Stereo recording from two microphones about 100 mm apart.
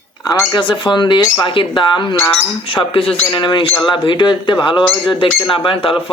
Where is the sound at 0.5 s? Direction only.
50° left (ahead or behind).